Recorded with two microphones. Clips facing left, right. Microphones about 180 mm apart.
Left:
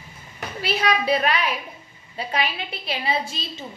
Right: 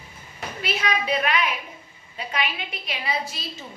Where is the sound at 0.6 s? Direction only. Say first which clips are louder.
Left 4 dB; 35° left (ahead or behind).